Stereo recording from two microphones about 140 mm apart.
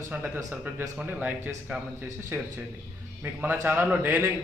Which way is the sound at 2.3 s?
15° right (ahead or behind).